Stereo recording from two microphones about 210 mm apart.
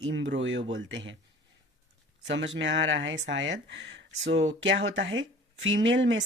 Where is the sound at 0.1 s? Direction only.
60° right (ahead or behind).